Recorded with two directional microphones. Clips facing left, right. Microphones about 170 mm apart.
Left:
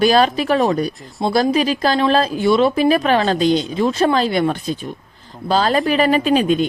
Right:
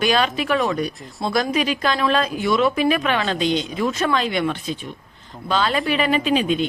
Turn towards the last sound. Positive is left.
turn(degrees=45)  # may be behind; listen again after turning